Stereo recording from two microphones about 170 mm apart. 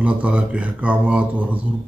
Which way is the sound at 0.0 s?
5° right (ahead or behind).